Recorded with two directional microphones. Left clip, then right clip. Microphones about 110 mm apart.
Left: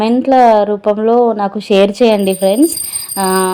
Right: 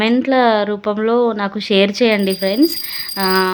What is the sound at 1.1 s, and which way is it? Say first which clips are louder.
Speech: left 3 dB; 15° right (ahead or behind).